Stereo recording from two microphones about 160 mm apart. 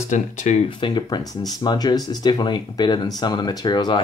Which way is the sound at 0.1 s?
50° left (ahead or behind).